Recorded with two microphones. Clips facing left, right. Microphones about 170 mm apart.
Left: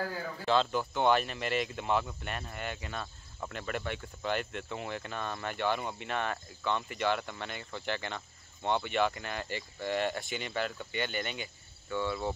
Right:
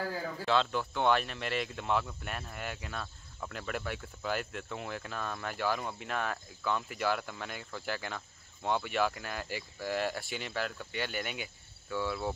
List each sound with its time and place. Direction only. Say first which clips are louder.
0.5 s speech: left 2 dB; centre (ahead or behind)